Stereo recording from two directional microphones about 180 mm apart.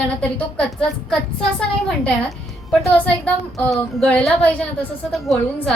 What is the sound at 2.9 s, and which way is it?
Speech, 10° left (ahead or behind).